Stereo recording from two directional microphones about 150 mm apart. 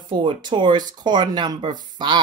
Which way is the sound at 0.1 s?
30° right (ahead or behind).